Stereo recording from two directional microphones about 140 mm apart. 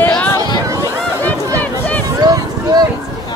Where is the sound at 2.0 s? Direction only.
25° right (ahead or behind).